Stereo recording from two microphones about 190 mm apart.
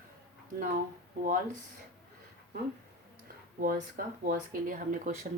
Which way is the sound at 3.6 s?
45° right (ahead or behind).